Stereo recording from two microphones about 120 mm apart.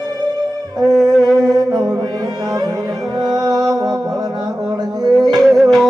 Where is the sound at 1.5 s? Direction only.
35° right (ahead or behind).